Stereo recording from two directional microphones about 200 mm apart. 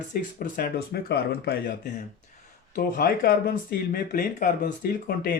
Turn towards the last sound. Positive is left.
turn(degrees=50)  # may be behind; listen again after turning